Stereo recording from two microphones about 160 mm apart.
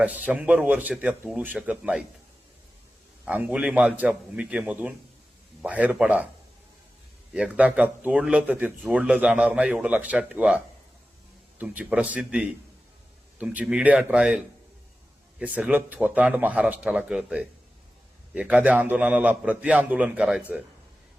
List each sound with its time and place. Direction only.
0.3 s speech: 10° right (ahead or behind)
3.2 s speech: 10° right (ahead or behind)
7.3 s speech: 5° right (ahead or behind)